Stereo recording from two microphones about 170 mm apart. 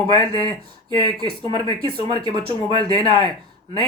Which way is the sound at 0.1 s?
25° right (ahead or behind).